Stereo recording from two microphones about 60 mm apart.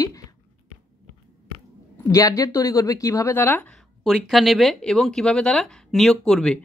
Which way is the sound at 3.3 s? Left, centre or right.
Left.